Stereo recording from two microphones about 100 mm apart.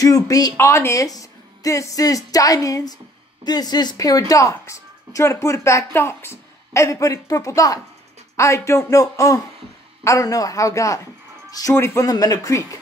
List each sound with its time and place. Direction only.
0.0 s a woman's voice: 35° left (ahead or behind)
12.1 s a woman's voice: 35° left (ahead or behind)